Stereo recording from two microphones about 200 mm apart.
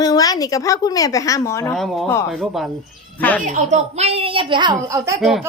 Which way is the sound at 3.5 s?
35° right (ahead or behind).